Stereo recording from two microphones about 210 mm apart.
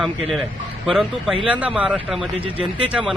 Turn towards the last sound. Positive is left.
turn(degrees=-5)  # may be behind; listen again after turning